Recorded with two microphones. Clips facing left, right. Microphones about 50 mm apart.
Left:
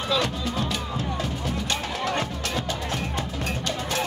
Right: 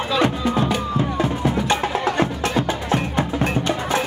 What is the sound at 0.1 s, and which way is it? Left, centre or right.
Music, right.